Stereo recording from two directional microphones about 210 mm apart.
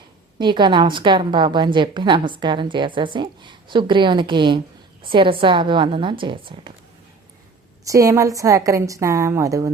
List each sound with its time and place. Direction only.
0.3 s a woman's voice: 20° right (ahead or behind)
7.9 s a woman's voice: 15° right (ahead or behind)